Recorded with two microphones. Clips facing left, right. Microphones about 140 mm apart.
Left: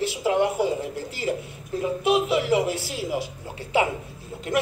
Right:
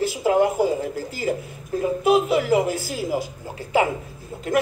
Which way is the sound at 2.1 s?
Centre (ahead or behind).